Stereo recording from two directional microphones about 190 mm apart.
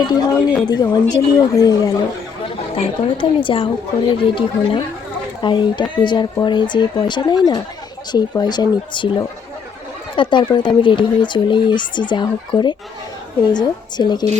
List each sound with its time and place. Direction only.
0.0 s speech: 20° left (ahead or behind)